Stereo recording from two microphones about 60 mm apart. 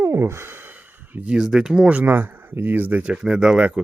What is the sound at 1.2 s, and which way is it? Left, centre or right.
Speech, centre.